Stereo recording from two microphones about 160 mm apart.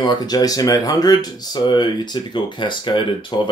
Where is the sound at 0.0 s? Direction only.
25° left (ahead or behind).